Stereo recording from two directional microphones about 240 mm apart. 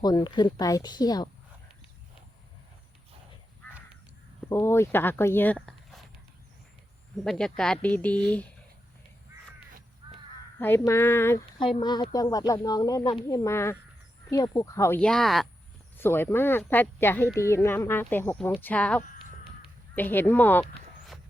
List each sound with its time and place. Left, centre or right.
0.0 s speech: centre
4.4 s speech: centre
7.3 s speech: centre
10.0 s crow: centre
10.6 s speech: centre